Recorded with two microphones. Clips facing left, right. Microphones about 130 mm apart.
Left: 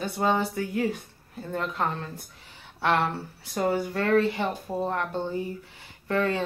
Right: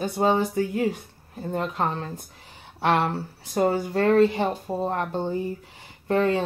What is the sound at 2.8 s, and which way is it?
Speech, 20° right (ahead or behind).